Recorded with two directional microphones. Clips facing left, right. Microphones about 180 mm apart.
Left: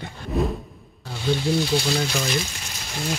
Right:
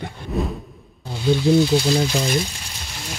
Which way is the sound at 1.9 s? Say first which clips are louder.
Right 4 dB; 30° right (ahead or behind).